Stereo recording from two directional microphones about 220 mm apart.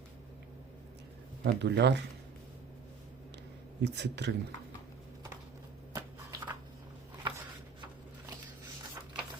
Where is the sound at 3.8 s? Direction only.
50° right (ahead or behind).